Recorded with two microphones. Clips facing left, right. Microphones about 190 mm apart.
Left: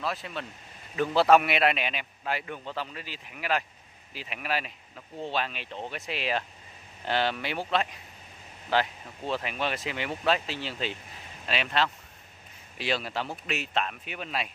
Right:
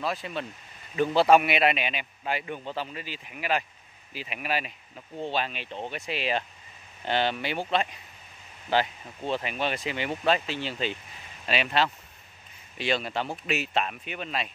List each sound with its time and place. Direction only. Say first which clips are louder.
0.0 s speech: right 2 dB; centre (ahead or behind)